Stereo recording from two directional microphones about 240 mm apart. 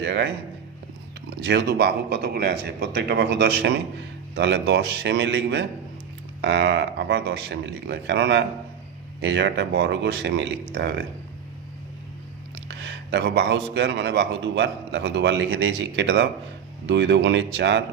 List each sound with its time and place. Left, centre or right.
0.0 s a man's voice: right
1.4 s a man's voice: right
12.6 s a man's voice: right